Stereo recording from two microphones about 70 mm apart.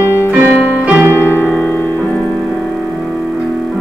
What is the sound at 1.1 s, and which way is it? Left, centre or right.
Piano, left.